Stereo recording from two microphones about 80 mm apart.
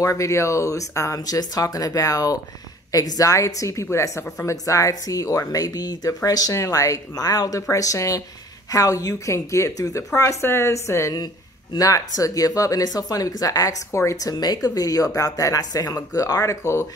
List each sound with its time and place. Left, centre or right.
0.0 s a woman's voice: left
14.3 s a woman's voice: left